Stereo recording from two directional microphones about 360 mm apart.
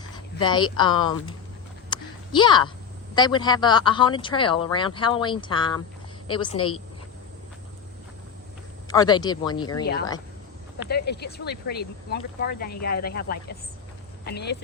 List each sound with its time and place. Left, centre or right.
0.3 s speech: centre
1.9 s a sound: centre
3.2 s speech: centre
8.9 s speech: centre
10.8 s speech: left